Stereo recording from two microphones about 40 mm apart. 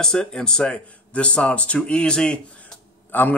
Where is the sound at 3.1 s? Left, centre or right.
Left.